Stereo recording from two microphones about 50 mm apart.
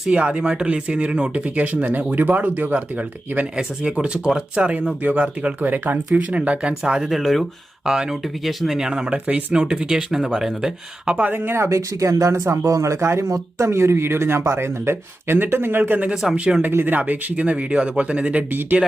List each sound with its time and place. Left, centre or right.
0.1 s speech: right
3.6 s speech: centre
5.6 s speech: right
6.1 s speech: right
7.1 s speech: centre
9.1 s speech: right; by 10.7 s centre
11.0 s speech: centre
11.5 s speech: right
15.8 s speech: right
16.7 s speech: right